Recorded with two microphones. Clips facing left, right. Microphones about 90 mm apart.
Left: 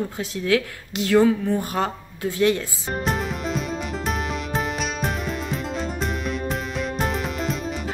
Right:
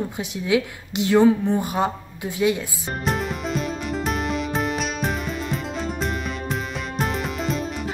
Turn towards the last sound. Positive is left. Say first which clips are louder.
# right 1 dB
turn(degrees=0)  # may be behind; listen again after turning